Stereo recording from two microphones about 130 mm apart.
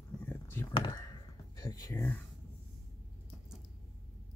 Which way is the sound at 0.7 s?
30° left (ahead or behind).